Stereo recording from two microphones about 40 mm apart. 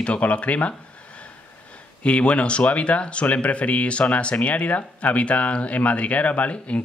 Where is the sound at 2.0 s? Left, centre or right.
Left.